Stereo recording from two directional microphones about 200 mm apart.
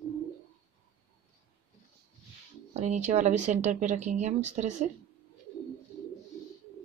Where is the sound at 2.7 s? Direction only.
35° right (ahead or behind).